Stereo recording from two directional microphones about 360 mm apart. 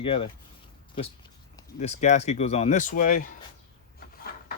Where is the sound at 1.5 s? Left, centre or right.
Centre.